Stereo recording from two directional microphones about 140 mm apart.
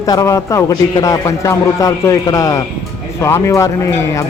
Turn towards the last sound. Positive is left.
turn(degrees=20)  # may be behind; listen again after turning